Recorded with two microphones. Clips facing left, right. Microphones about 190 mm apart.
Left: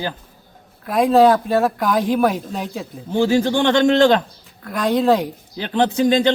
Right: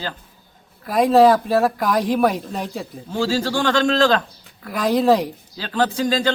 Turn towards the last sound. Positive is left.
turn(degrees=20)  # may be behind; listen again after turning